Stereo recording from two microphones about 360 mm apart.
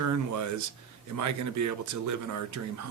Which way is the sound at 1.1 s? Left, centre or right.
Right.